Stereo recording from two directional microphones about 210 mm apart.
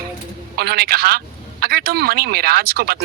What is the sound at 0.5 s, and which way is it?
Speech, 50° right (ahead or behind).